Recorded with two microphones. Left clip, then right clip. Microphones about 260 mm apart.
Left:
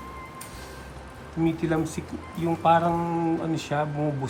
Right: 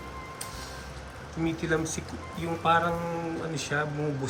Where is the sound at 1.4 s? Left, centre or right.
Centre.